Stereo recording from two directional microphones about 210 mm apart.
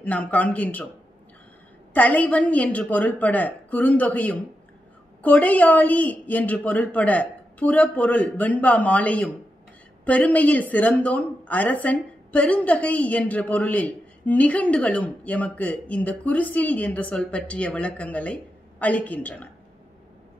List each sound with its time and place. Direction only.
0.0 s speech: 5° left (ahead or behind)
2.0 s speech: 5° left (ahead or behind)